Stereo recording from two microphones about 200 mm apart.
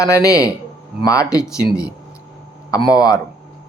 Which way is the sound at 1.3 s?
5° right (ahead or behind).